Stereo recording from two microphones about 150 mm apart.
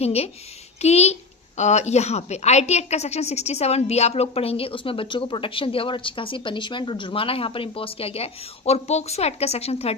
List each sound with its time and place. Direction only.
0.0 s a woman's voice: 45° left (ahead or behind)